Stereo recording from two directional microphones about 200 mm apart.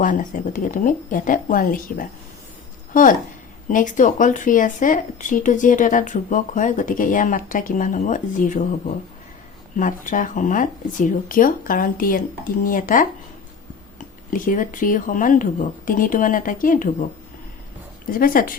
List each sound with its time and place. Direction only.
0.0 s a woman's voice: 40° left (ahead or behind)
9.7 s speech: 40° left (ahead or behind)
18.2 s a woman's voice: 45° left (ahead or behind)